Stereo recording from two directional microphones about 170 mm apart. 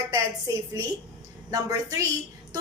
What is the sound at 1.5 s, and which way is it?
Speech, 20° right (ahead or behind).